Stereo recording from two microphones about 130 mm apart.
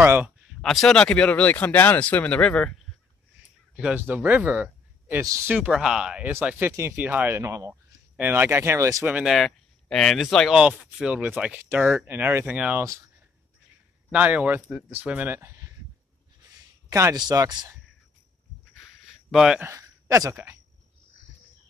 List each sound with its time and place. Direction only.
0.0 s speech: 15° right (ahead or behind)
0.6 s speech: 5° left (ahead or behind)
3.7 s speech: 10° right (ahead or behind)
5.7 s speech: 5° right (ahead or behind); by 9.0 s 20° right (ahead or behind)
9.0 s speech: 5° right (ahead or behind)
14.1 s speech: 10° right (ahead or behind)
16.9 s speech: 25° right (ahead or behind)
18.8 s a sound: centre (ahead or behind)
19.6 s speech: 25° right (ahead or behind)